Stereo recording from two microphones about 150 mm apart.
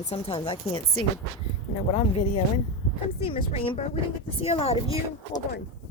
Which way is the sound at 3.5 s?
40° left (ahead or behind).